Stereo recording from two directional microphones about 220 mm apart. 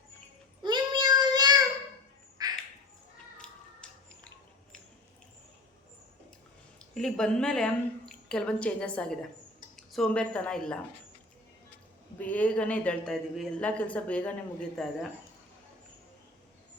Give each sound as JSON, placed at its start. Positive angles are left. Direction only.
{"t": 0.6, "sound": "child singing", "side_deg": -20}
{"t": 2.4, "sound": "bird", "side_deg": -15}
{"t": 3.4, "sound": "music", "side_deg": 5}
{"t": 6.7, "sound": "a woman's voice", "side_deg": 0}
{"t": 12.2, "sound": "speech", "side_deg": 5}